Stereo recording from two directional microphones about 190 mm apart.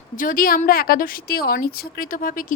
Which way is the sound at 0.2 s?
45° left (ahead or behind).